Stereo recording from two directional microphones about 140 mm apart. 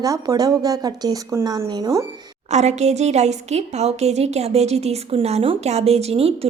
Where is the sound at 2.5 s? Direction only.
55° right (ahead or behind).